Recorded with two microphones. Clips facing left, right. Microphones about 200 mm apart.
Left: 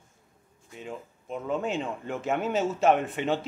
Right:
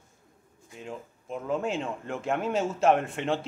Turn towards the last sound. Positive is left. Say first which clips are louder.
# left 1 dB
turn(degrees=0)  # may be behind; listen again after turning